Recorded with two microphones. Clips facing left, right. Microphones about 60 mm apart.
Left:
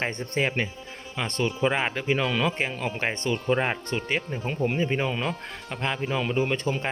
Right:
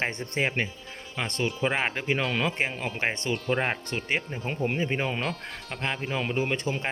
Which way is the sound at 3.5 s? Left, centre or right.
Centre.